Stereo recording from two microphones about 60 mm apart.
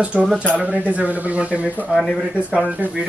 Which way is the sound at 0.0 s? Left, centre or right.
Centre.